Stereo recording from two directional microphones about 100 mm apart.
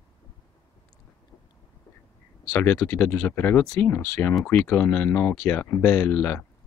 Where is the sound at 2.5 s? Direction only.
15° left (ahead or behind).